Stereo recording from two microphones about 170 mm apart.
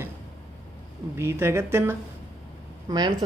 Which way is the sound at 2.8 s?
25° right (ahead or behind).